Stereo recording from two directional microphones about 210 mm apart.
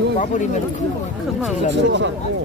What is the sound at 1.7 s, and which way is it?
Speech, 60° right (ahead or behind).